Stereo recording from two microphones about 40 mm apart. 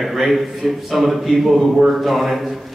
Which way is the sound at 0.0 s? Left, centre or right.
Centre.